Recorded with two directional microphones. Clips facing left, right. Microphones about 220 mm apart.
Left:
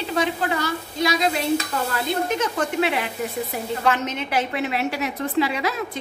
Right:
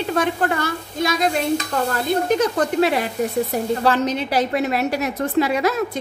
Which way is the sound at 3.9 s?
35° right (ahead or behind).